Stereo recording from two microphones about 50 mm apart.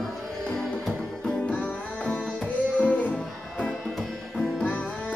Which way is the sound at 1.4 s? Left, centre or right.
Left.